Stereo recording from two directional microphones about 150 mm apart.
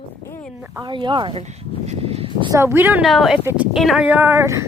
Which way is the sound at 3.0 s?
Centre (ahead or behind).